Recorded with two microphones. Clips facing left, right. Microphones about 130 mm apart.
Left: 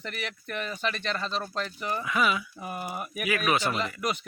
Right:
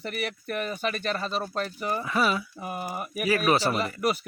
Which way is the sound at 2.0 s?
35° right (ahead or behind).